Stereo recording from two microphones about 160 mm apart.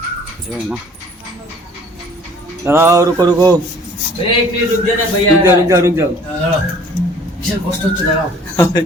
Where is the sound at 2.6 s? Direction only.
15° right (ahead or behind).